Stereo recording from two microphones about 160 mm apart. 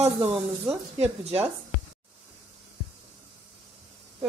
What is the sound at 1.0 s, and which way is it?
Speech, 40° right (ahead or behind).